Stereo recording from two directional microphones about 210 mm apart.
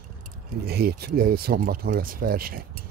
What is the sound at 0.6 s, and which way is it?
Speech, 45° right (ahead or behind).